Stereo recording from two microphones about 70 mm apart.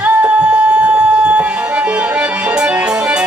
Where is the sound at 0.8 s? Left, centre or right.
Centre.